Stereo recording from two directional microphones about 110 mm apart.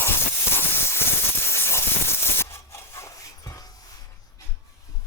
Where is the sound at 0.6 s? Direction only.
20° left (ahead or behind).